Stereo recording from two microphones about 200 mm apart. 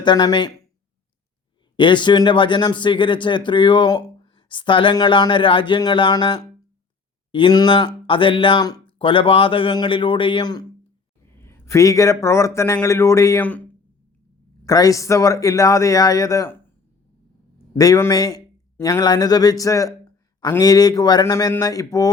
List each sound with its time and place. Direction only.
0.0 s a man's voice: 20° left (ahead or behind)
1.7 s a man's voice: 25° left (ahead or behind)
14.6 s a man's voice: 15° left (ahead or behind)
17.7 s a man's voice: 15° left (ahead or behind)